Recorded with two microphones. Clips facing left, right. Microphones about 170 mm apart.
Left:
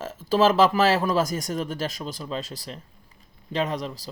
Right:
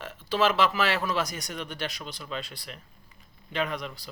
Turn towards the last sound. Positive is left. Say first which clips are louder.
# left 4 dB
turn(degrees=40)  # may be behind; listen again after turning